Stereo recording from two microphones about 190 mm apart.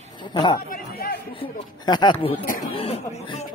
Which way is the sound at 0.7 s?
50° left (ahead or behind).